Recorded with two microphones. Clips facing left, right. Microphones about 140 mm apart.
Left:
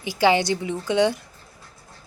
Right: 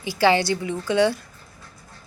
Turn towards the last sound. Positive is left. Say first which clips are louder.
# even
turn(degrees=20)  # may be behind; listen again after turning